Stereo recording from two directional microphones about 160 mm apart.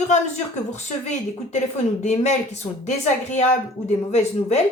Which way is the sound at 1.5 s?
45° left (ahead or behind).